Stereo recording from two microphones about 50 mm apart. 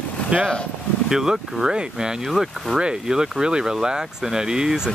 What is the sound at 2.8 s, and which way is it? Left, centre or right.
Speech, centre.